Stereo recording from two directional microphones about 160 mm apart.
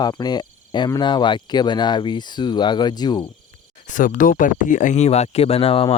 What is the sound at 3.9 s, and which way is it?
Speech, 55° left (ahead or behind).